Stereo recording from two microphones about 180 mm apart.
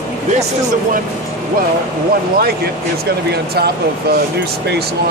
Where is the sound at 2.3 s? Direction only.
60° right (ahead or behind).